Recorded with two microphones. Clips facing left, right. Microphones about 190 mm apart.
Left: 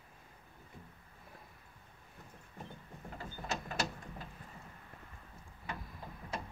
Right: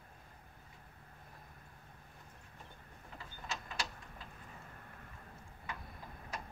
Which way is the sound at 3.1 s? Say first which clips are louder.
Left 5 dB; 45° left (ahead or behind).